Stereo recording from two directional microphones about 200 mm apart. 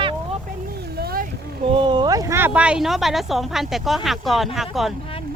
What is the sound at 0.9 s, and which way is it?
Vehicle, 50° right (ahead or behind).